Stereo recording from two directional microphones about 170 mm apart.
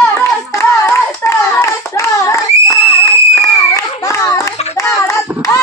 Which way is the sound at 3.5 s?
20° left (ahead or behind).